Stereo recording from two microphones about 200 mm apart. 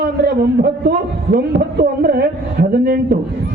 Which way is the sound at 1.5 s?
50° right (ahead or behind).